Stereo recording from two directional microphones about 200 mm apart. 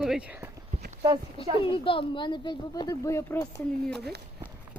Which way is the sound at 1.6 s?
25° left (ahead or behind).